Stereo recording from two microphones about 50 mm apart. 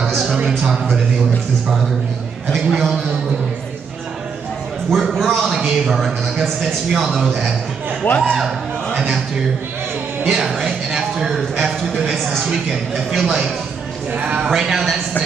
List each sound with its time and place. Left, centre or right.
0.0 s a sound: centre
0.5 s a man's voice: centre
2.5 s speech: centre
5.1 s a man's voice: centre
8.0 s speech: left
10.2 s speech: centre
14.1 s speech: right
14.5 s a man's voice: centre